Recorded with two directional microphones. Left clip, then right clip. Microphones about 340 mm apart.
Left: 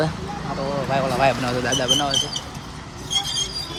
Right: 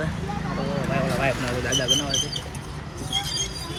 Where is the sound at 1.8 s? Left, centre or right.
Left.